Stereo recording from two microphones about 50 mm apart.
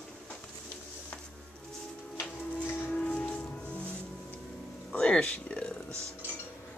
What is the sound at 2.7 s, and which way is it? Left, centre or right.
Music, left.